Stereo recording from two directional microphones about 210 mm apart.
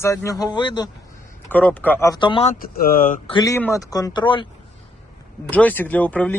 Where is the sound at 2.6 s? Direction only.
40° left (ahead or behind).